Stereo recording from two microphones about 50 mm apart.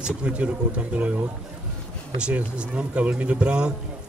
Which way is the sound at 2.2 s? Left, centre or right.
Right.